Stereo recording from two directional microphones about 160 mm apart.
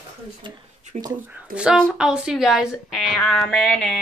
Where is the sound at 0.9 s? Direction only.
45° right (ahead or behind).